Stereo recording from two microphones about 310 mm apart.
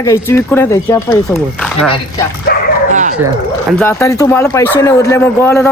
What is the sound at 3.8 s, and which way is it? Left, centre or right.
Speech, centre.